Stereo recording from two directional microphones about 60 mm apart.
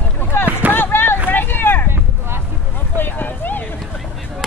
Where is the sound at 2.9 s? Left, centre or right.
Left.